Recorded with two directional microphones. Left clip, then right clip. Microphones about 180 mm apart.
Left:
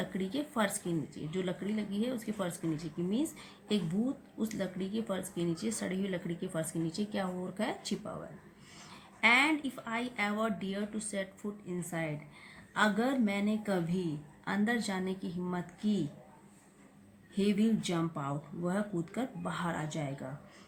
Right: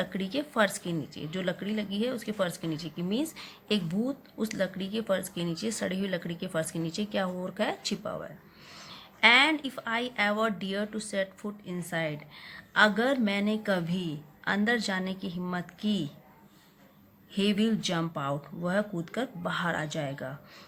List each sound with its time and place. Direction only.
0.0 s a woman's voice: 30° right (ahead or behind)
17.3 s a woman's voice: 35° right (ahead or behind)